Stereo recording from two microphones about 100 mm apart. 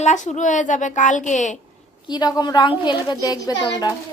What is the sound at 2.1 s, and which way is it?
A woman's voice, 45° left (ahead or behind).